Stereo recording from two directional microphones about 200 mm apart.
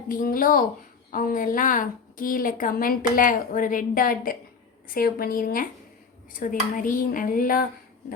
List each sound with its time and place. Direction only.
0.1 s a woman's voice: 45° left (ahead or behind)